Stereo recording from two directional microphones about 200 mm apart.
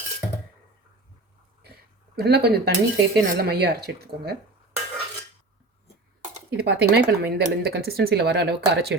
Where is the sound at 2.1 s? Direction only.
55° right (ahead or behind).